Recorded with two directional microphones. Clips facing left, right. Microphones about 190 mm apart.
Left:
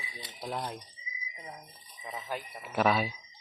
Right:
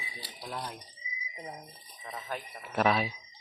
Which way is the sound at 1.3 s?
35° right (ahead or behind).